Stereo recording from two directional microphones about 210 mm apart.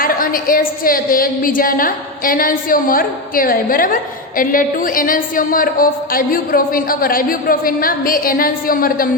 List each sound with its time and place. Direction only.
0.0 s a woman's voice: 40° left (ahead or behind)